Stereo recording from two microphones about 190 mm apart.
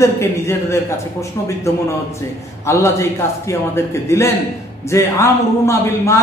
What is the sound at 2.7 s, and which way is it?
Speech, 15° left (ahead or behind).